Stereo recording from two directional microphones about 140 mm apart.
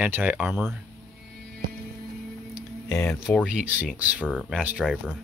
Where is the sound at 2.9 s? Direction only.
20° left (ahead or behind).